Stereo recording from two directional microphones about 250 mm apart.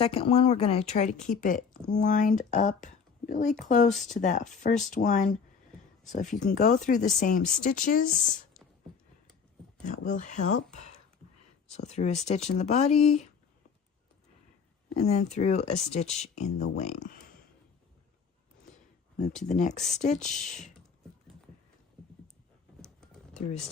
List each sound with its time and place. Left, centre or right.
0.0 s speech: left
10.1 s speech: left
11.7 s speech: left
14.9 s speech: left
19.4 s speech: left